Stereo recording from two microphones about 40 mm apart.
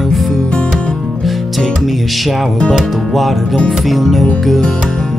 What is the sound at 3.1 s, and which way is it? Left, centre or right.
Music, centre.